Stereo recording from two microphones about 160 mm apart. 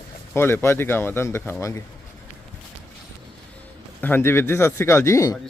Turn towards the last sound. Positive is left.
turn(degrees=20)  # may be behind; listen again after turning